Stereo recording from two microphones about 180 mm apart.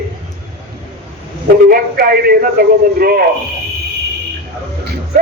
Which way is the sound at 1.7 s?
55° right (ahead or behind).